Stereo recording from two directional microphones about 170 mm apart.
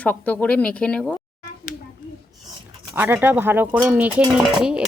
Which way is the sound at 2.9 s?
10° right (ahead or behind).